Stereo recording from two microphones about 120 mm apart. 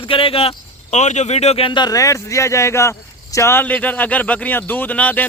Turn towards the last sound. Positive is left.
turn(degrees=15)  # may be behind; listen again after turning